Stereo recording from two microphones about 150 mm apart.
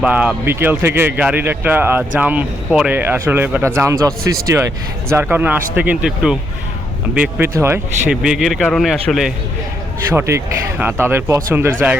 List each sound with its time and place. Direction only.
0.0 s speech: 10° right (ahead or behind)
8.1 s a man's voice: 5° right (ahead or behind)
10.2 s speech: 15° right (ahead or behind)